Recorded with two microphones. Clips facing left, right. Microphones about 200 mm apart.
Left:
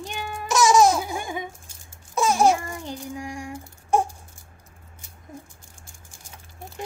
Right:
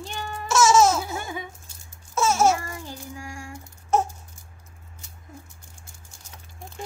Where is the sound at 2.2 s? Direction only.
15° left (ahead or behind).